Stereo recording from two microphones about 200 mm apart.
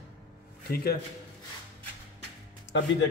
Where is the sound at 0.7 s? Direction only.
50° left (ahead or behind).